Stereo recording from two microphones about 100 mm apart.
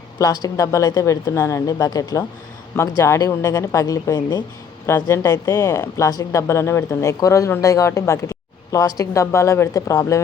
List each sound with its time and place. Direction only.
0.2 s speech: 40° left (ahead or behind)
4.9 s speech: 25° left (ahead or behind)